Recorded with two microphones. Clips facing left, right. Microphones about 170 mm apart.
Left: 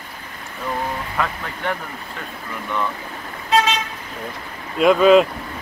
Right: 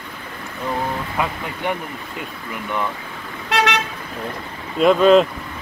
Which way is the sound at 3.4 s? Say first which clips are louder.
Left 1 dB; 75° right (ahead or behind).